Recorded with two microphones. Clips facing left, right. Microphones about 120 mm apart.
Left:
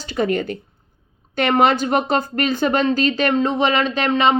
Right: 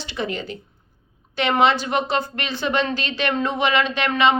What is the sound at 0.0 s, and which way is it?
A woman's voice, 45° left (ahead or behind).